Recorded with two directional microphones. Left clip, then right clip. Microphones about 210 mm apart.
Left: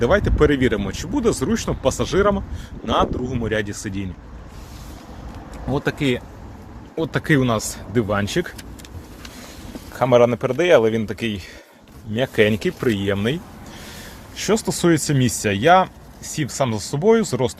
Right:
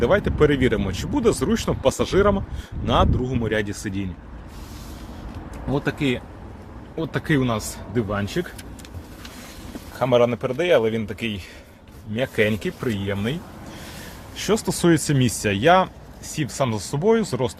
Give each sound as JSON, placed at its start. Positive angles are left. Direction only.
{"t": 0.0, "sound": "speech", "side_deg": 0}
{"t": 5.7, "sound": "speech", "side_deg": 20}
{"t": 9.9, "sound": "speech", "side_deg": 25}
{"t": 12.8, "sound": "speech", "side_deg": 45}
{"t": 14.3, "sound": "speech", "side_deg": 5}